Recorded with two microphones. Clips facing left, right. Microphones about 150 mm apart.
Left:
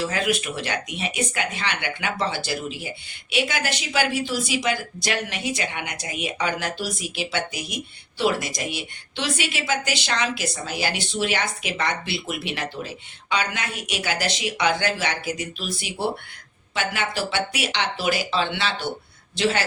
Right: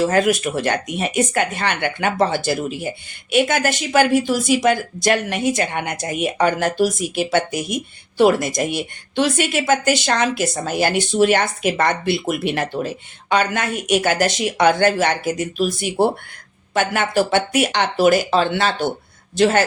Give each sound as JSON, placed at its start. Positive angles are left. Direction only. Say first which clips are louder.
{"t": 0.0, "sound": "a woman's voice", "louder": "right 8 dB", "side_deg": -45}